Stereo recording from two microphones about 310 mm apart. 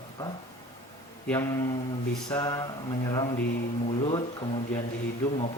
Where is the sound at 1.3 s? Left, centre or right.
Centre.